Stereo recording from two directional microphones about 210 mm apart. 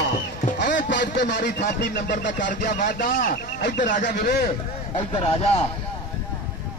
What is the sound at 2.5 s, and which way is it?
A man's voice, 35° left (ahead or behind).